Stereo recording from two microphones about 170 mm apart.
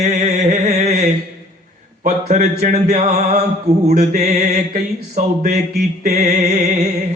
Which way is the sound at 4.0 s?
45° right (ahead or behind).